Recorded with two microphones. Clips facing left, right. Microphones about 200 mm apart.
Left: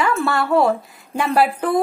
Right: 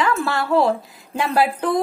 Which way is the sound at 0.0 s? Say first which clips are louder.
Left 1 dB; centre (ahead or behind).